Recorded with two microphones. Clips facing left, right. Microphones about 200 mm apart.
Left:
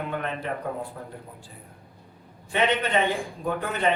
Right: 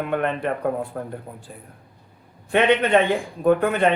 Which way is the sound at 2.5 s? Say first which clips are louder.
Right 7 dB; 60° right (ahead or behind).